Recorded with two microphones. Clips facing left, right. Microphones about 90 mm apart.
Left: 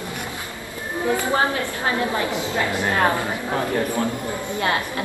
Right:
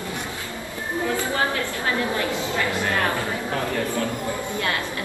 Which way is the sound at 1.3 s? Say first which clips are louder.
Left 3 dB; 25° left (ahead or behind).